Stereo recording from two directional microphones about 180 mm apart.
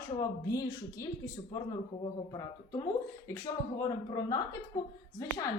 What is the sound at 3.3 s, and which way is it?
A woman's voice, 20° left (ahead or behind).